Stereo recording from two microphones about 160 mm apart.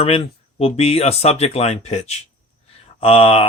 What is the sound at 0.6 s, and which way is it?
Speech, 40° left (ahead or behind).